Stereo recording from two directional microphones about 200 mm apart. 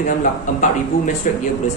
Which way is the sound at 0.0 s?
40° left (ahead or behind).